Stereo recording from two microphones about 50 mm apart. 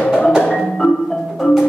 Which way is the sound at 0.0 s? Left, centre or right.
Left.